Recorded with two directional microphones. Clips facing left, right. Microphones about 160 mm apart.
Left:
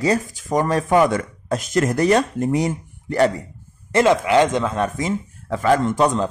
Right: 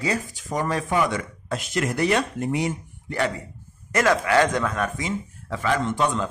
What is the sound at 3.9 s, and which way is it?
Speech, 20° left (ahead or behind).